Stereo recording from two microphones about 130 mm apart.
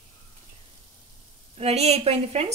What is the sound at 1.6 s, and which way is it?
Speech, 55° right (ahead or behind).